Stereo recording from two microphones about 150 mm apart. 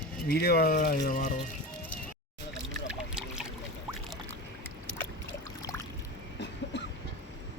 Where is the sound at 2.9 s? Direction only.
5° right (ahead or behind).